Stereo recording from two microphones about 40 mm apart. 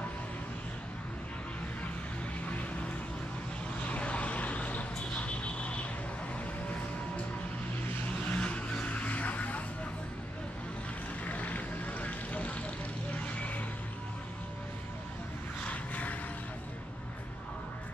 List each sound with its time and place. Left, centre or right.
3.8 s vehicle: left
8.2 s vehicle: left
11.2 s vehicle: left
13.2 s a sound: left
15.6 s vehicle: left